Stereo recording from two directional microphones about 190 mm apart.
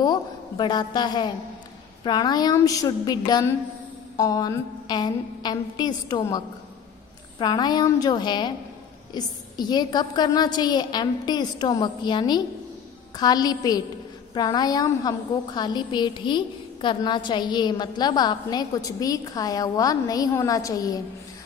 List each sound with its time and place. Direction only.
0.0 s a woman's voice: 20° left (ahead or behind)